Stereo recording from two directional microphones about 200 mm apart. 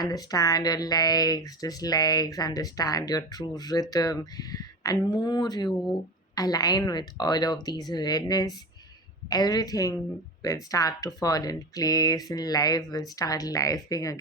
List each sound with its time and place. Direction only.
0.0 s speech: 20° left (ahead or behind)